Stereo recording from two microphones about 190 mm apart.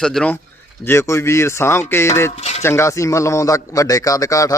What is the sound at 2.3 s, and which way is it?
Speech, 35° left (ahead or behind).